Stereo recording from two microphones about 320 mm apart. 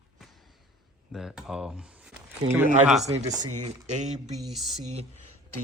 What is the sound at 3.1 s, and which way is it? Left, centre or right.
Speech, centre.